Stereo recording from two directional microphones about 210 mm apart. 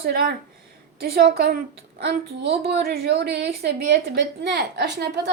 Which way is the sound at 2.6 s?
45° right (ahead or behind).